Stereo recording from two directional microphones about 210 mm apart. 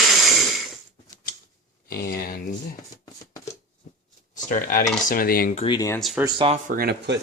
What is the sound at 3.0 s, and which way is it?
Shuffling cards, 15° left (ahead or behind).